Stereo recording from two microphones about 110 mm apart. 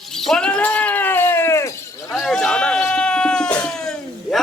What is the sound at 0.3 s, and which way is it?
Sheep, 5° left (ahead or behind).